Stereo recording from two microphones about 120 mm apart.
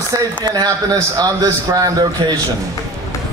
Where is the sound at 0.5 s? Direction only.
30° right (ahead or behind).